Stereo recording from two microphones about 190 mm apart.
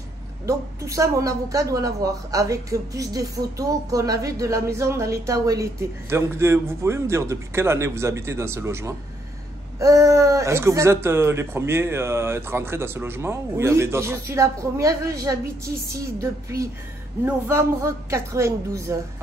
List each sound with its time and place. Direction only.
0.5 s a woman's voice: 15° right (ahead or behind)